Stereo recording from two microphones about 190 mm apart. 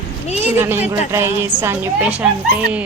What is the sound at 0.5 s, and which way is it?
Speech, 10° right (ahead or behind).